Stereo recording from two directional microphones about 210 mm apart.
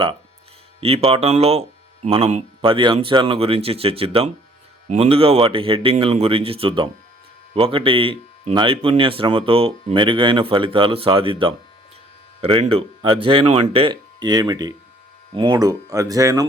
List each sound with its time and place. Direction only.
0.8 s speech: 25° right (ahead or behind)